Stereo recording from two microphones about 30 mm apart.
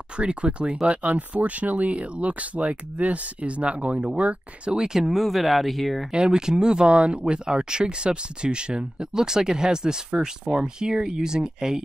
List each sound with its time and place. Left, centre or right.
0.2 s speech: right
4.6 s speech: right
4.9 s speech: centre
6.1 s speech: right